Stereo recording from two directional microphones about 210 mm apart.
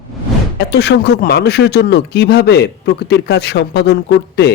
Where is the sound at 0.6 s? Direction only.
55° left (ahead or behind).